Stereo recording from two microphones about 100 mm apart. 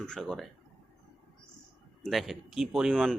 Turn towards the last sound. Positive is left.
turn(degrees=5)  # may be behind; listen again after turning